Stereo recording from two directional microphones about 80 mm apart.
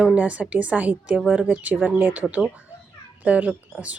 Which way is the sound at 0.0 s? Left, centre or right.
Centre.